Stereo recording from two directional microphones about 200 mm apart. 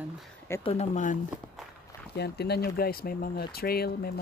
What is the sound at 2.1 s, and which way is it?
Speech, 55° left (ahead or behind).